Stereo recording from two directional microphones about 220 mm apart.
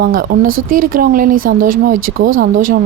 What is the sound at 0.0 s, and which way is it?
A woman's voice, 40° right (ahead or behind).